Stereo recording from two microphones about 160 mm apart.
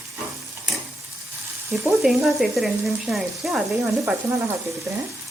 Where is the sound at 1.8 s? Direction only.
Centre (ahead or behind).